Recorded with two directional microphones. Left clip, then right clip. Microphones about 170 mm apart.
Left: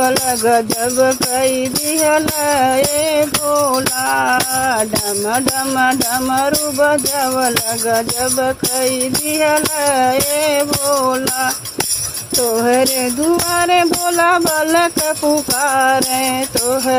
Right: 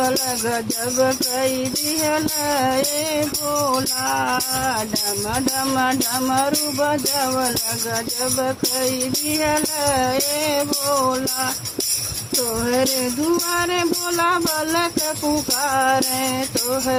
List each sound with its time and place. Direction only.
0.0 s speech: 30° left (ahead or behind)
12.4 s jingle bell: 30° left (ahead or behind)
13.5 s speech: 35° left (ahead or behind)